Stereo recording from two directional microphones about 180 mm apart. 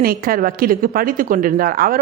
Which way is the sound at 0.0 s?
55° right (ahead or behind).